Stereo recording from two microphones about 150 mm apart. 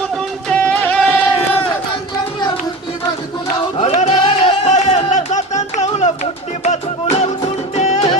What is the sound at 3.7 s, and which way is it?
Music, 45° left (ahead or behind).